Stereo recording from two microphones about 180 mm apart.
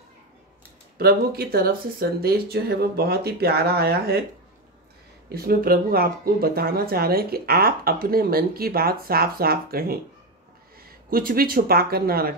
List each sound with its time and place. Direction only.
0.9 s speech: 60° right (ahead or behind)
5.3 s speech: 55° right (ahead or behind)